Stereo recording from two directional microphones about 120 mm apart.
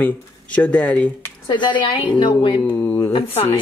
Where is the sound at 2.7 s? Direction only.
15° left (ahead or behind).